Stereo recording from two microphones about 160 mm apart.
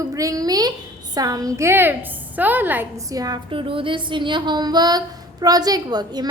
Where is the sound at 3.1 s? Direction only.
25° right (ahead or behind).